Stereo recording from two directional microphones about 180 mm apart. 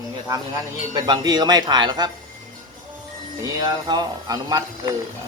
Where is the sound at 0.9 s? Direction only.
25° right (ahead or behind).